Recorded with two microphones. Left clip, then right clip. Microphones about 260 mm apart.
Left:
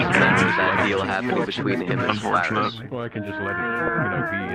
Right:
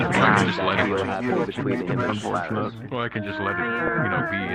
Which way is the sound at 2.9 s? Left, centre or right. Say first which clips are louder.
Right 2 dB; right.